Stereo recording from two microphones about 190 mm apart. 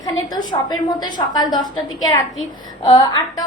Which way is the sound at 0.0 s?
20° left (ahead or behind).